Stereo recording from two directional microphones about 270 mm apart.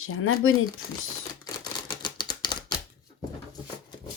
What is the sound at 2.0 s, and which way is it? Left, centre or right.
Typewriter, centre.